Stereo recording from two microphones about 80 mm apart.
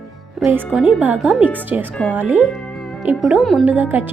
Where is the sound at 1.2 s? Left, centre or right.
Centre.